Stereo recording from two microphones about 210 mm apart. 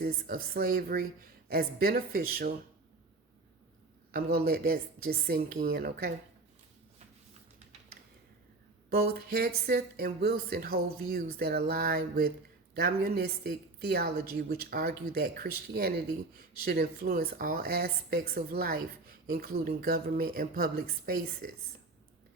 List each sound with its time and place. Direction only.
0.0 s a woman's voice: 45° right (ahead or behind)
4.1 s a woman's voice: 45° right (ahead or behind)
8.9 s a woman's voice: 50° right (ahead or behind)